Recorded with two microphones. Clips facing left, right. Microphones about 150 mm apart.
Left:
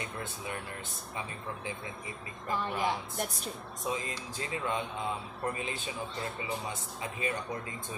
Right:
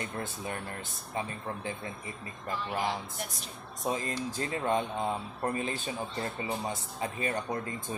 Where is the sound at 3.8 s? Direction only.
45° right (ahead or behind).